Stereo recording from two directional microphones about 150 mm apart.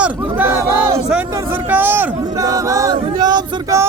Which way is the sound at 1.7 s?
15° right (ahead or behind).